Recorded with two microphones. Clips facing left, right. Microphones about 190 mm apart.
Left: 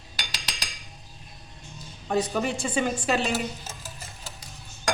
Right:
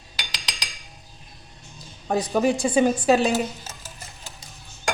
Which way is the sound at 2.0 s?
35° right (ahead or behind).